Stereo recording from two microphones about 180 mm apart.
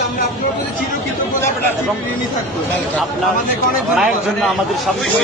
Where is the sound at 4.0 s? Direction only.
Centre (ahead or behind).